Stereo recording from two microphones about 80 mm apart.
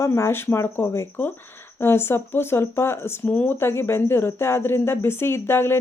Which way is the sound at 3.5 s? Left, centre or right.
Left.